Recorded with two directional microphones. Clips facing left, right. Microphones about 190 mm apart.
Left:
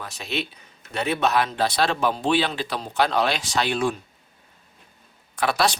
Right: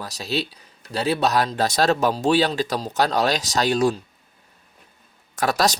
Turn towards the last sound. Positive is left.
turn(degrees=-40)  # may be behind; listen again after turning